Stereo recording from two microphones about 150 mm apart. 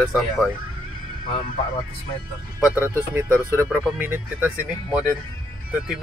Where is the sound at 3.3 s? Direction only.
15° right (ahead or behind).